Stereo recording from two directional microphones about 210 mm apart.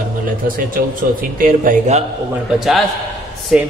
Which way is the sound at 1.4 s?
40° right (ahead or behind).